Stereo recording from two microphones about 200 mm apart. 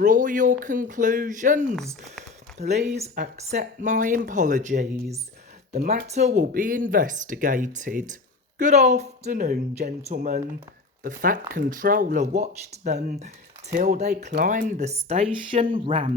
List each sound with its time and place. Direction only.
0.0 s speech: 40° right (ahead or behind)
1.7 s speech: centre (ahead or behind)
2.6 s speech: 35° right (ahead or behind)